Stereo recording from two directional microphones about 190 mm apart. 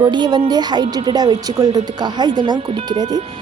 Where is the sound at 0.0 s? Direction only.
20° right (ahead or behind).